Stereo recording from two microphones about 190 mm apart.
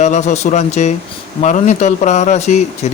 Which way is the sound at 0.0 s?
40° left (ahead or behind).